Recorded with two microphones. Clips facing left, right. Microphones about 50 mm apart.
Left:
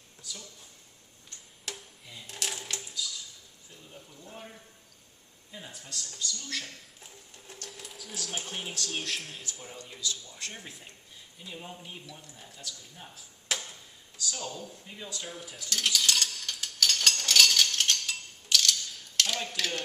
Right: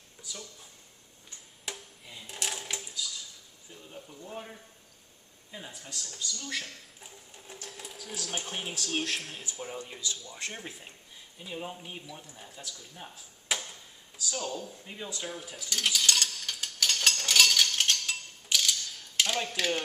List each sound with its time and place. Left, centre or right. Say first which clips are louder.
0.2 s speech: right 1 dB; centre
1.3 s music: even; centre
1.6 s a sound: right 1 dB; centre
2.0 s typewriter: right 1 dB; centre
4.0 s a sound: right 6 dB; centre
4.3 s speech: right 3 dB; centre
13.5 s tick-tock: right 1 dB; centre
14.3 s speech: right 6 dB; right
14.8 s a sound: right 2 dB; centre
19.5 s speech: right 3 dB; centre